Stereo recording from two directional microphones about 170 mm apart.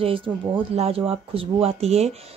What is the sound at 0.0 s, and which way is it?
Speech, 30° right (ahead or behind).